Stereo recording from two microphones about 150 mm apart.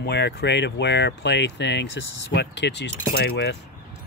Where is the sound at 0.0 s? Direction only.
90° left.